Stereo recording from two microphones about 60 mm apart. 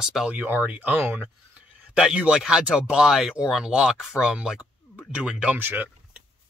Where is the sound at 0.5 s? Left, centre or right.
Right.